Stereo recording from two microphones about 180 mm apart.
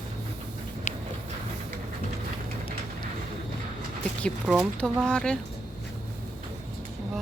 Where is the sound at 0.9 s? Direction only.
40° left (ahead or behind).